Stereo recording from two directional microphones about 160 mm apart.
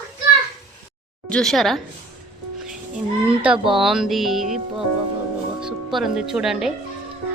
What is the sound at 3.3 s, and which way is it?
A child's voice, 5° right (ahead or behind).